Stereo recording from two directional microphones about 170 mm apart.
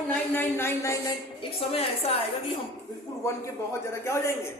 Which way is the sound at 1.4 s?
35° left (ahead or behind).